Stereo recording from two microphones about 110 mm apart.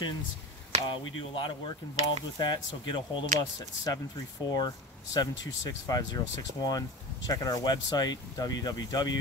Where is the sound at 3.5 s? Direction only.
35° left (ahead or behind).